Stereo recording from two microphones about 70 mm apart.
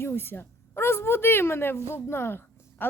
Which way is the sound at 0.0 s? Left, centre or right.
Left.